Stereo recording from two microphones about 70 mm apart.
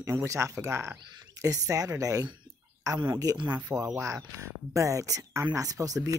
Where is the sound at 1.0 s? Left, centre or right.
Right.